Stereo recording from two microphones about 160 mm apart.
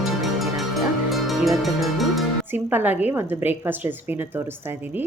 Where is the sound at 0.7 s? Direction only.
Centre (ahead or behind).